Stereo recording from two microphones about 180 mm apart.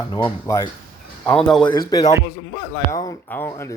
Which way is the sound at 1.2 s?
5° left (ahead or behind).